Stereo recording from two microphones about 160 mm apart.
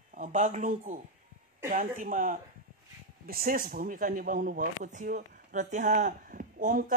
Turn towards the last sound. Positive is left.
turn(degrees=-55)  # may be behind; listen again after turning